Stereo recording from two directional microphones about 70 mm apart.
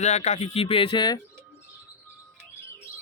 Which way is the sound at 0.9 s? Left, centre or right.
Left.